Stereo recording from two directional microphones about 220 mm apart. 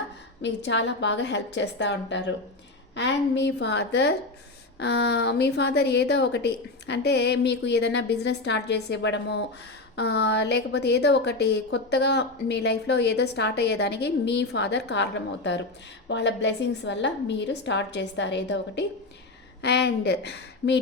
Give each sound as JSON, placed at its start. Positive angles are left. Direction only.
{"t": 0.4, "sound": "a woman's voice", "side_deg": 55}